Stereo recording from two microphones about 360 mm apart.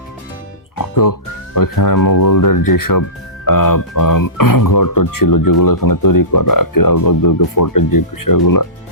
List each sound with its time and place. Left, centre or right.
0.8 s speech: left